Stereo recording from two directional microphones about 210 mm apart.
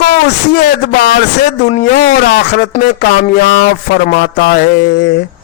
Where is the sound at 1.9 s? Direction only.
50° left (ahead or behind).